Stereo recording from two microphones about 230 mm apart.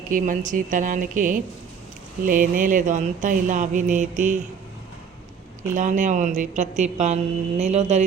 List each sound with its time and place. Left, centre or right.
0.1 s speech: right
5.7 s a woman's voice: right